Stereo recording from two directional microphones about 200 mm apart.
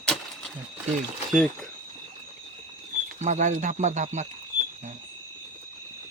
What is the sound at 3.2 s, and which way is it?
Speech, 35° right (ahead or behind).